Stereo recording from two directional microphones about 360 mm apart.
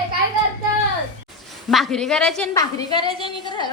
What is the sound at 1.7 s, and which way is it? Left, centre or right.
A woman's voice, centre.